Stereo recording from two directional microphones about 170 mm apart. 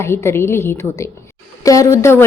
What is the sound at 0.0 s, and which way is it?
A woman's voice, 15° left (ahead or behind).